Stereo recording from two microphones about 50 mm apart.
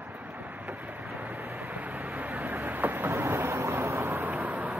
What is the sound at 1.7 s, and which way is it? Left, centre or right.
Vehicle, right.